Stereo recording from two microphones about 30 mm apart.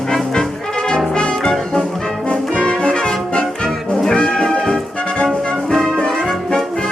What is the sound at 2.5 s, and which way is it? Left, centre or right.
Brass instrument, left.